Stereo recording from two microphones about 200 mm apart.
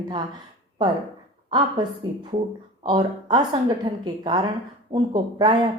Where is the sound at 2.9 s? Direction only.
20° right (ahead or behind).